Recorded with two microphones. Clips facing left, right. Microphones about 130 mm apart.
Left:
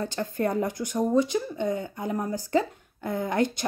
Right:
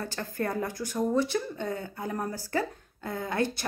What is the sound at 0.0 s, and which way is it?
Speech, 20° left (ahead or behind).